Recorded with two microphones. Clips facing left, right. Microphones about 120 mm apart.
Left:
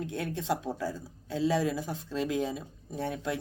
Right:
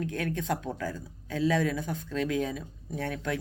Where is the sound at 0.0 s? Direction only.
15° left (ahead or behind).